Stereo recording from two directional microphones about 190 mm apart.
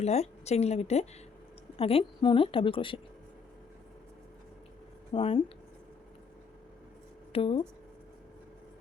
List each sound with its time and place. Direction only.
0.0 s a woman's voice: 35° left (ahead or behind)
5.1 s a woman's voice: 30° left (ahead or behind)
7.3 s a woman's voice: 25° left (ahead or behind)